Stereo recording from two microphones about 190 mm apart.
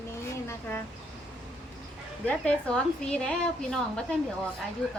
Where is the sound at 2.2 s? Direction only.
5° left (ahead or behind).